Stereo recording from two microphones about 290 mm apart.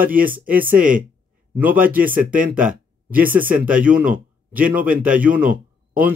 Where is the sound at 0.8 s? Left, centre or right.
Right.